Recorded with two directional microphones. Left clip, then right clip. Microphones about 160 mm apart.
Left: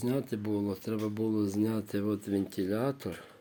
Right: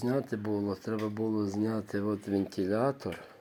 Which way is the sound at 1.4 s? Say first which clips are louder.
Left 1 dB; 40° left (ahead or behind).